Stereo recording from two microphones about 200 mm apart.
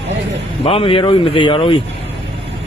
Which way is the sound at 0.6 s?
30° left (ahead or behind).